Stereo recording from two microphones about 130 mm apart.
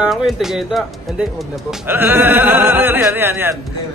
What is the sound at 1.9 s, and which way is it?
Speech, 15° right (ahead or behind).